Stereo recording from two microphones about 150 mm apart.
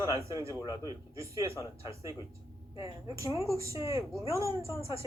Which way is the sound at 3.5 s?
20° right (ahead or behind).